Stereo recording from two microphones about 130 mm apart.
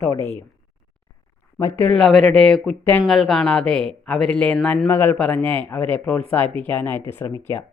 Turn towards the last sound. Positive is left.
turn(degrees=15)  # may be behind; listen again after turning